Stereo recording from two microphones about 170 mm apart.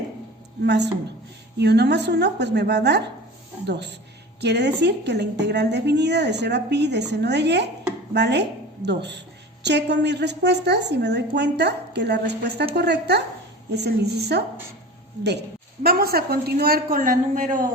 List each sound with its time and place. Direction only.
0.6 s a woman's voice: 90° right
4.4 s a woman's voice: 85° right; by 17.7 s 50° right (ahead or behind)